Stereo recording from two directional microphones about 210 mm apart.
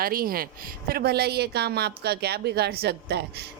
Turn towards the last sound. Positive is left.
turn(degrees=-50)  # may be behind; listen again after turning